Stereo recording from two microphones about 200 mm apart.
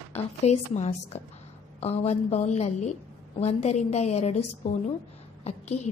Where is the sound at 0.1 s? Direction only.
35° left (ahead or behind).